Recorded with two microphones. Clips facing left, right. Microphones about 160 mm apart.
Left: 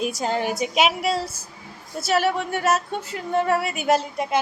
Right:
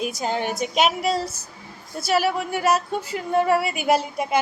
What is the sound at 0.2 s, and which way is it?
A woman's voice, centre (ahead or behind).